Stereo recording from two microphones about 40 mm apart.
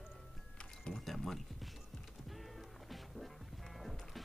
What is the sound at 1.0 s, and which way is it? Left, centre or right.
Speech, centre.